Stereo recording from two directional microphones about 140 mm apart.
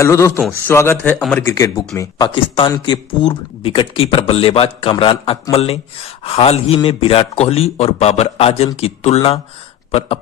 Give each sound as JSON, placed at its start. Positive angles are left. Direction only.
{"t": 0.0, "sound": "a man's voice", "side_deg": 20}